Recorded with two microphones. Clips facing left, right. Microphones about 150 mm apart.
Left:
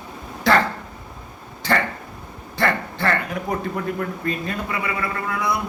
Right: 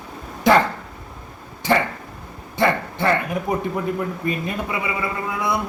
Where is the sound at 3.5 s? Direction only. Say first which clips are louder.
Right 2 dB; 20° right (ahead or behind).